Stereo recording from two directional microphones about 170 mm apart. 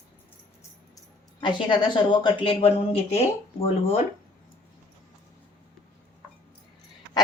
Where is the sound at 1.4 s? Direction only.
30° left (ahead or behind).